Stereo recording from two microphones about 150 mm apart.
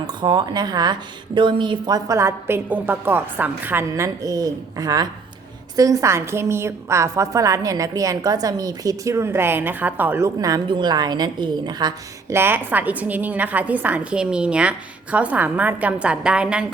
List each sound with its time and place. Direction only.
0.1 s a woman's voice: 30° right (ahead or behind)
2.0 s a woman's voice: 20° right (ahead or behind)
12.3 s a woman's voice: 15° right (ahead or behind)